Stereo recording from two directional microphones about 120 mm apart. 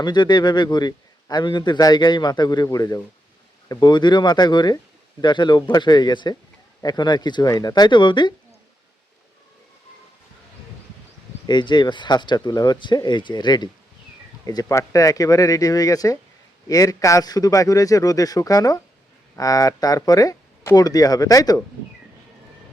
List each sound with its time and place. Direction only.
0.0 s a man's voice: 35° left (ahead or behind)
11.4 s a man's voice: 40° left (ahead or behind)